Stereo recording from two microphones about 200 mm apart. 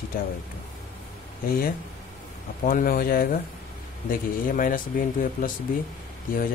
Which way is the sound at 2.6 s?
45° left (ahead or behind).